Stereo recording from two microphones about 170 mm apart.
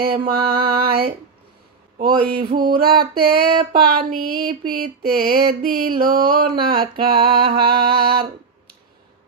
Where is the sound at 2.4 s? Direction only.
60° right (ahead or behind).